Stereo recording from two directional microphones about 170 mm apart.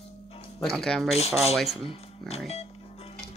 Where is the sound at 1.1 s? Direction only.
40° left (ahead or behind).